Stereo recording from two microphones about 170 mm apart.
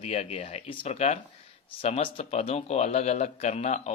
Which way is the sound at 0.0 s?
40° left (ahead or behind).